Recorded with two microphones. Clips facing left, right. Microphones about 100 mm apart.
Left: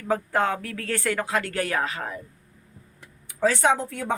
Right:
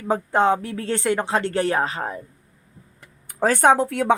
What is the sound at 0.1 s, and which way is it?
Speech, 25° right (ahead or behind).